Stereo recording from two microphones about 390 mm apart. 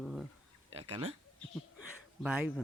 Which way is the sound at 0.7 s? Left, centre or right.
Centre.